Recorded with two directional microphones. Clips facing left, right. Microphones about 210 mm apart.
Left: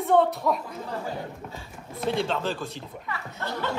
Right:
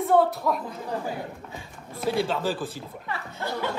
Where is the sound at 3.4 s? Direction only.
10° right (ahead or behind).